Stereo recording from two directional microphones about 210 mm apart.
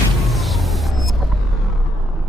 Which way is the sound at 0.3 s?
Centre (ahead or behind).